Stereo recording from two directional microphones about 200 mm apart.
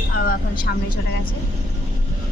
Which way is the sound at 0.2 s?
45° left (ahead or behind).